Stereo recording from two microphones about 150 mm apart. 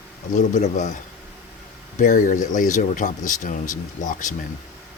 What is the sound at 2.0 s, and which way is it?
Speech, 60° left (ahead or behind).